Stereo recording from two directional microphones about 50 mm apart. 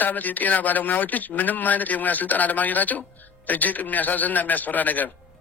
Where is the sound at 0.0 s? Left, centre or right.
Left.